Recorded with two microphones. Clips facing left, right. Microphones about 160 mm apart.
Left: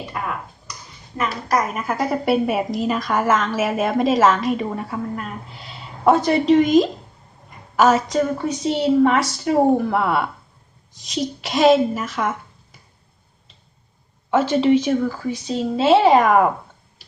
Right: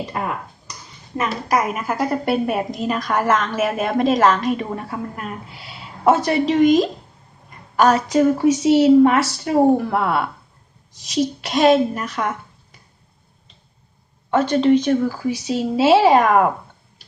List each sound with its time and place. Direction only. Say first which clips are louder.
1.1 s a woman's voice: right 2 dB; 20° right (ahead or behind)
1.5 s a woman's voice: right 1 dB; 5° right (ahead or behind)
14.3 s a woman's voice: right 1 dB; 5° left (ahead or behind)